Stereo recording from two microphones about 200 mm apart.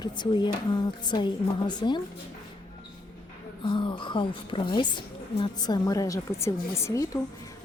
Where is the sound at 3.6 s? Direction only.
25° left (ahead or behind).